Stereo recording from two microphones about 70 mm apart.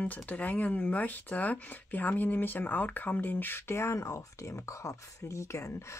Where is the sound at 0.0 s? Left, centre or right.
Left.